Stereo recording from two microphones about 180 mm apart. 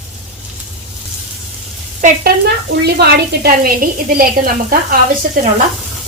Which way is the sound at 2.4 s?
65° right (ahead or behind).